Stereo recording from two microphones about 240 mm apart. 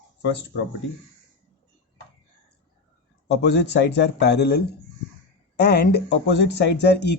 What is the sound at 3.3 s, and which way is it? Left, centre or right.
Speech, left.